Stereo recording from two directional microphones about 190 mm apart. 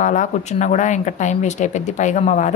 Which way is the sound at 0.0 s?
40° left (ahead or behind).